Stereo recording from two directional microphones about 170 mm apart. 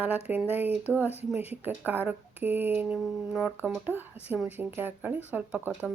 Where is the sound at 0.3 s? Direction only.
10° right (ahead or behind).